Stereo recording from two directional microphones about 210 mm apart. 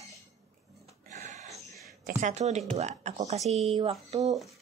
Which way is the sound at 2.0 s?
35° right (ahead or behind).